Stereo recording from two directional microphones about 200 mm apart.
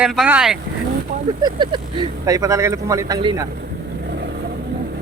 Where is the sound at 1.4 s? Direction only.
20° right (ahead or behind).